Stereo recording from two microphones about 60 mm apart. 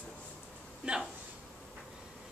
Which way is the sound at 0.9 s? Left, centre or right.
Centre.